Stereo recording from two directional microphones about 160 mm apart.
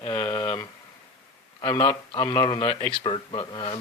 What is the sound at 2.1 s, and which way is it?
Speech, 25° left (ahead or behind).